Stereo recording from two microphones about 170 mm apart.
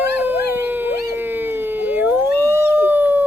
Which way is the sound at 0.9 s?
65° left (ahead or behind).